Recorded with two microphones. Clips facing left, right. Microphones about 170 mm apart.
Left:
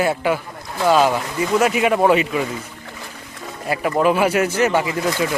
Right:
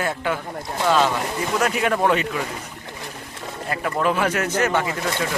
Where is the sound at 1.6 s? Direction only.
5° left (ahead or behind).